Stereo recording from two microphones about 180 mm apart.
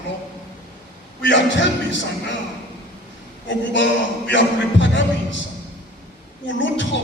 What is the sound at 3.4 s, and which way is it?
A man's voice, 90° left.